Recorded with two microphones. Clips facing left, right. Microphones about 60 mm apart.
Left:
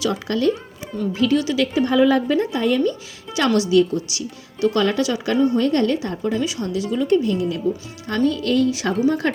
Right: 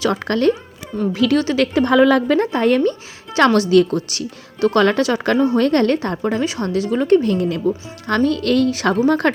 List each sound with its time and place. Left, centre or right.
0.1 s speech: right
1.1 s speech: right
1.4 s speech: right
1.6 s a woman's voice: right
2.5 s a woman's voice: right